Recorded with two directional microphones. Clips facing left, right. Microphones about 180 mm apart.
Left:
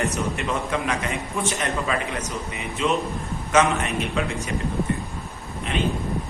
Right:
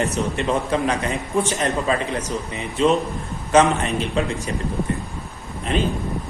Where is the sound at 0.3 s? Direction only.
35° right (ahead or behind).